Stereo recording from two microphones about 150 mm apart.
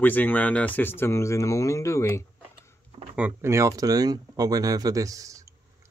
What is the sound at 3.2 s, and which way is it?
Speech, 15° right (ahead or behind).